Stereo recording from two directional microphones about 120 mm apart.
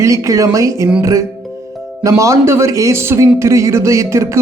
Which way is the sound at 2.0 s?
25° right (ahead or behind).